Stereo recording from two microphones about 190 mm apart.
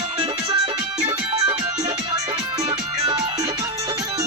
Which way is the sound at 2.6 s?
30° right (ahead or behind).